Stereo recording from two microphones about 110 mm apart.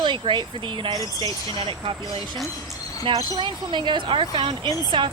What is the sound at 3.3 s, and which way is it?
Speech, 45° right (ahead or behind).